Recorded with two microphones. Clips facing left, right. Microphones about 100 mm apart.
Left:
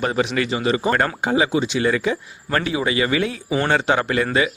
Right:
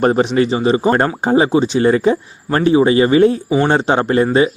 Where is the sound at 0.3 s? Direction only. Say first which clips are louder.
Right 7 dB; 30° right (ahead or behind).